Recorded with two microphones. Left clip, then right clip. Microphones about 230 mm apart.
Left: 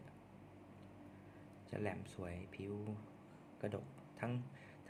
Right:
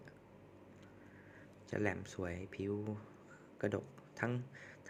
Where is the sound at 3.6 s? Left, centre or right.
Right.